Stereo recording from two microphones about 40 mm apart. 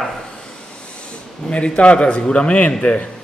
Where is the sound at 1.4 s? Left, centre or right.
Left.